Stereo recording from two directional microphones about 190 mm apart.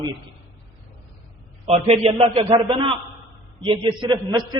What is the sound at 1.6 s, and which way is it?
A man's voice, 35° right (ahead or behind).